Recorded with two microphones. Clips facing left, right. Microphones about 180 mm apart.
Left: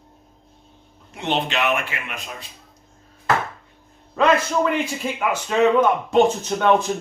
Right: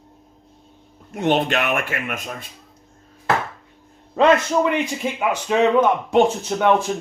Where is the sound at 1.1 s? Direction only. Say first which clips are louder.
Right 5 dB; 50° right (ahead or behind).